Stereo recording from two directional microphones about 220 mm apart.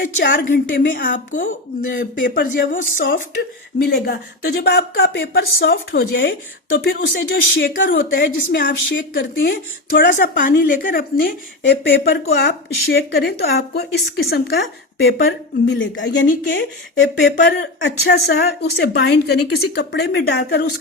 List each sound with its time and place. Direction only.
0.2 s speech: 55° left (ahead or behind)
2.0 s speech: 40° left (ahead or behind); by 7.9 s 55° left (ahead or behind)
7.9 s speech: 40° left (ahead or behind)
8.7 s speech: 50° left (ahead or behind)
10.0 s speech: 35° left (ahead or behind)